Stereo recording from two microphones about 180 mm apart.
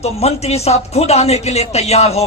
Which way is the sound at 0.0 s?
35° left (ahead or behind).